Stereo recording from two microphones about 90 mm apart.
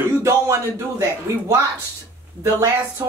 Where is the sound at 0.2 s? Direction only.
30° right (ahead or behind).